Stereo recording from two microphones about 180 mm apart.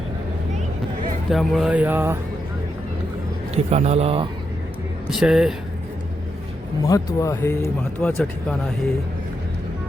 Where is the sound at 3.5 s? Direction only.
35° right (ahead or behind).